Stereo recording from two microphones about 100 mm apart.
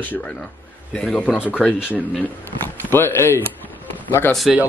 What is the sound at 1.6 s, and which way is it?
Speech, 5° right (ahead or behind).